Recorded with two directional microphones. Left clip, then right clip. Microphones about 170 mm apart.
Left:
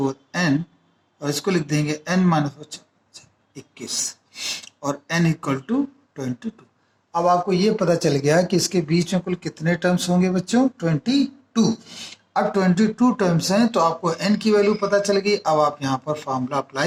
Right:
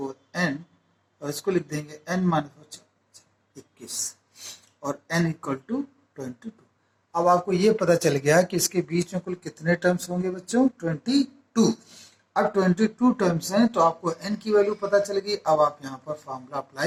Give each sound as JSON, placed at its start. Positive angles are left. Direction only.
{"t": 0.0, "sound": "speech", "side_deg": 20}
{"t": 0.3, "sound": "speech", "side_deg": 45}
{"t": 3.8, "sound": "speech", "side_deg": 40}
{"t": 12.9, "sound": "speech", "side_deg": 20}
{"t": 13.1, "sound": "speech", "side_deg": 45}